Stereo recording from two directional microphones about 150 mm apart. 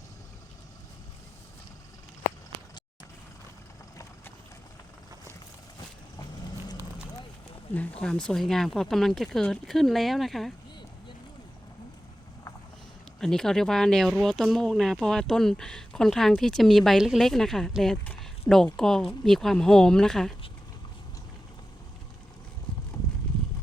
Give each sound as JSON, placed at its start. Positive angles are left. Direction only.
{"t": 6.1, "sound": "vehicle", "side_deg": 25}
{"t": 7.7, "sound": "speech", "side_deg": 10}
{"t": 13.1, "sound": "speech", "side_deg": 5}